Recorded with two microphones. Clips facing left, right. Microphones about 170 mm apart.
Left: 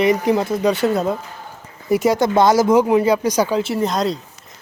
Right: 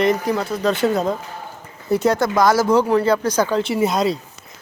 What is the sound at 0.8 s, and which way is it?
Speech, 5° left (ahead or behind).